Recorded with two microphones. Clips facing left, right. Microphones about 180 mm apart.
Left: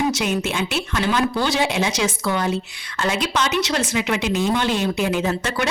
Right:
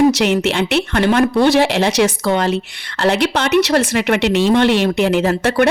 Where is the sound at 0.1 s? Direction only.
75° right (ahead or behind).